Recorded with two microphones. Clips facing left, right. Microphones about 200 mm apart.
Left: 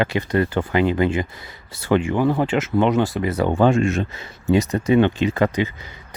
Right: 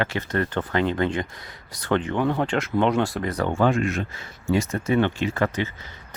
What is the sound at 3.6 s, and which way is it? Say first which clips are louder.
Speech: left 4 dB; 25° left (ahead or behind).